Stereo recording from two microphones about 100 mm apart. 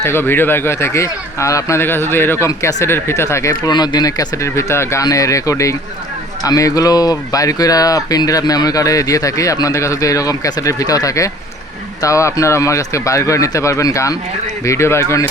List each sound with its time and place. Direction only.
0.0 s speech: 25° left (ahead or behind)
2.5 s speech: 35° left (ahead or behind)
3.7 s speech: 45° left (ahead or behind); by 15.0 s 25° left (ahead or behind)